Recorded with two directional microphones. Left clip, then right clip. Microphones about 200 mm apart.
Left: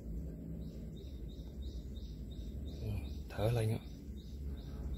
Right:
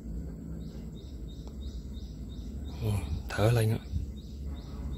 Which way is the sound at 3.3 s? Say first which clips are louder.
Right 8 dB; 20° right (ahead or behind).